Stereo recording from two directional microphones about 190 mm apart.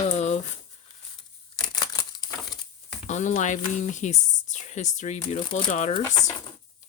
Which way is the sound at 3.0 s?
40° left (ahead or behind).